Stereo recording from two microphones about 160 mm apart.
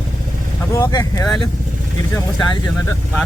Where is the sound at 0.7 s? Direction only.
20° left (ahead or behind).